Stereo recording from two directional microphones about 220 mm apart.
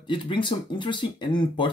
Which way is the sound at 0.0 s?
20° left (ahead or behind).